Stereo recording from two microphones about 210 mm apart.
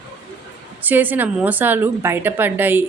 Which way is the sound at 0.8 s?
10° right (ahead or behind).